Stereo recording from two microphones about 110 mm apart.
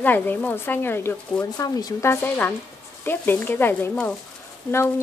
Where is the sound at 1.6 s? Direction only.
35° left (ahead or behind).